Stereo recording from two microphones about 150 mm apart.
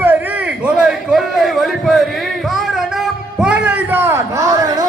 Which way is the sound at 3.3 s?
5° right (ahead or behind).